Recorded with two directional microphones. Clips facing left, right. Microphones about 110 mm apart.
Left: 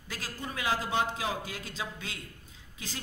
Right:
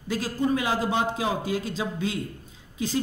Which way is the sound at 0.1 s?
20° right (ahead or behind).